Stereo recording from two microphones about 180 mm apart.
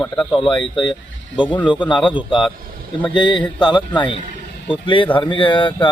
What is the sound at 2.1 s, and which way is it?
Speech, 25° left (ahead or behind).